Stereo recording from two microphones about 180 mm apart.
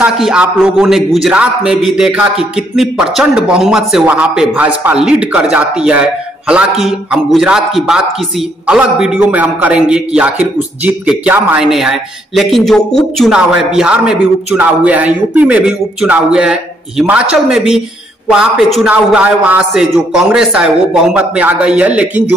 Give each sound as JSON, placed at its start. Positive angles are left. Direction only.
{"t": 0.0, "sound": "a man's voice", "side_deg": -5}